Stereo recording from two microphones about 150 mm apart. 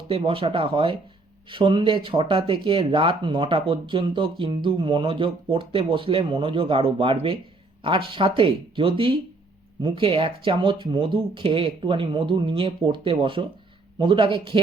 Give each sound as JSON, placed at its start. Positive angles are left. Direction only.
{"t": 0.1, "sound": "speech", "side_deg": -40}